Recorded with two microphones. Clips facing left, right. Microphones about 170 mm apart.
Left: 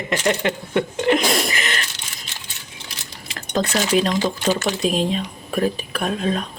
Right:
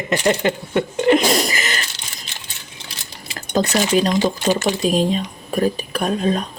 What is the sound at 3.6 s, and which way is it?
Speech, 15° right (ahead or behind).